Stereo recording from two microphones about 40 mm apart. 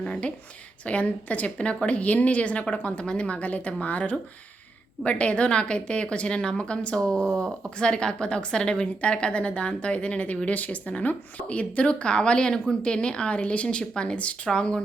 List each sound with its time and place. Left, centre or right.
0.0 s a woman's voice: left